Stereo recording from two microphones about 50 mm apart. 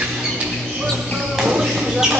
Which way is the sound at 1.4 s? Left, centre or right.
Centre.